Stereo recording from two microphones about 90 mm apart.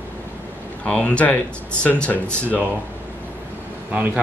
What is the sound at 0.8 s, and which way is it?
Speech, 15° left (ahead or behind).